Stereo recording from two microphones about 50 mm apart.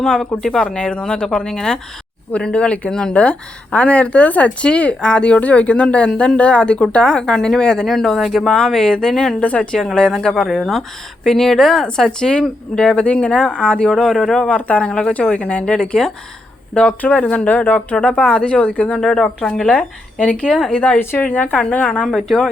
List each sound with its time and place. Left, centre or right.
0.0 s speech: centre
7.9 s speech: centre
8.4 s speech: centre
9.4 s speech: left
9.7 s speech: centre
13.9 s speech: centre
14.5 s speech: left
17.0 s speech: left
18.9 s speech: centre
19.7 s speech: left
21.2 s a woman's voice: left
22.1 s speech: centre